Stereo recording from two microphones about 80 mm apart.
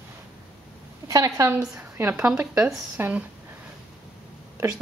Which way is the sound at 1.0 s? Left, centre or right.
Right.